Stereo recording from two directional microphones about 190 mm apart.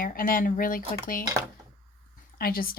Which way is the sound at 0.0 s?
50° left (ahead or behind).